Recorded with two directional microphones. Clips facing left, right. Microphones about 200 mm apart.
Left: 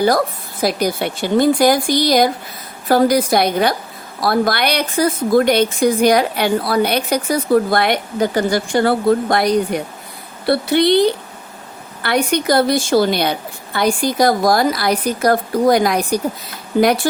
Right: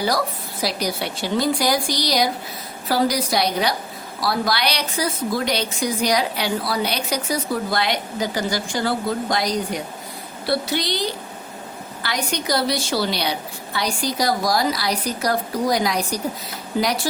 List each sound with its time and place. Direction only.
0.6 s a woman's voice: 50° left (ahead or behind)